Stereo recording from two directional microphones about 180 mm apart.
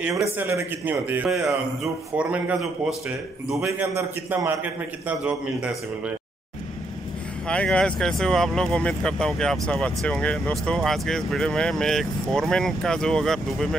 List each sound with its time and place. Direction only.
0.4 s a man's voice: 15° right (ahead or behind)
3.5 s a man's voice: 15° right (ahead or behind)
7.4 s speech: 5° left (ahead or behind)